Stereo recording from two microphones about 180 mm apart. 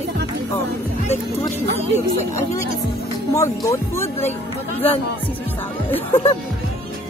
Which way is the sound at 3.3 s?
15° left (ahead or behind).